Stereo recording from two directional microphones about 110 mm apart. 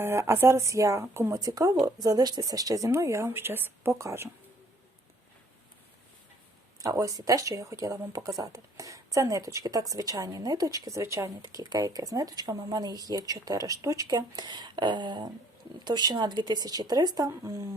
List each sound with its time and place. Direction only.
0.0 s speech: 25° right (ahead or behind)
6.8 s speech: 30° right (ahead or behind)